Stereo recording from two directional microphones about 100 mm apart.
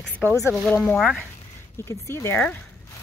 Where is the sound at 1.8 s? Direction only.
30° left (ahead or behind).